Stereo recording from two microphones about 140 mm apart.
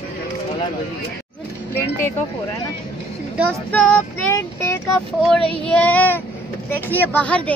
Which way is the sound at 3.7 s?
15° left (ahead or behind).